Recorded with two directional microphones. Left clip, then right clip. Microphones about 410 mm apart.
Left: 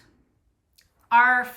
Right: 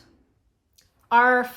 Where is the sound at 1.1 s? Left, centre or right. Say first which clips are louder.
Even; centre.